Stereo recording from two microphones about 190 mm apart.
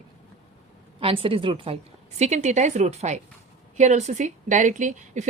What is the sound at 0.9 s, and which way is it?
A woman's voice, 30° right (ahead or behind).